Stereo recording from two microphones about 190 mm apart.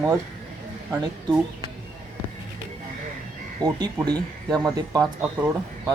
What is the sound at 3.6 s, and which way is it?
Speech, 20° right (ahead or behind).